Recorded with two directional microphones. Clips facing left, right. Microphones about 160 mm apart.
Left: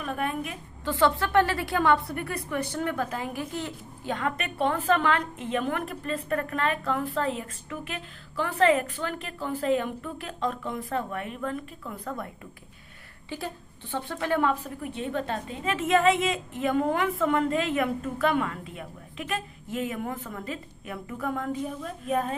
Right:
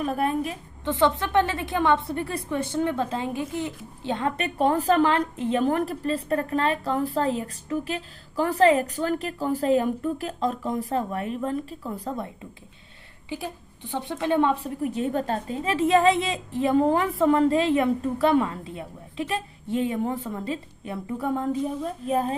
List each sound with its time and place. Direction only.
0.0 s a woman's voice: 35° right (ahead or behind)
0.9 s a woman's voice: 20° right (ahead or behind)
4.1 s a woman's voice: 30° right (ahead or behind)